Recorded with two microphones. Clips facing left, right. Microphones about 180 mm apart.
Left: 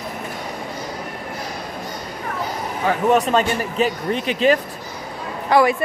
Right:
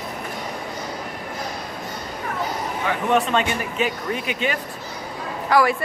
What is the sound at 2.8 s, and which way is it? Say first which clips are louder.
Speech: left 4 dB; 40° left (ahead or behind).